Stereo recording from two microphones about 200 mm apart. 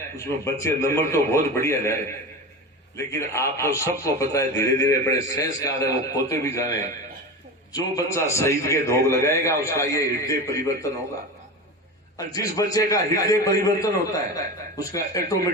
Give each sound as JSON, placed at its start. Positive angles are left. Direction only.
{"t": 0.2, "sound": "a man's voice", "side_deg": 15}
{"t": 3.0, "sound": "a man's voice", "side_deg": 15}
{"t": 7.9, "sound": "a man's voice", "side_deg": 15}
{"t": 12.1, "sound": "a man's voice", "side_deg": 15}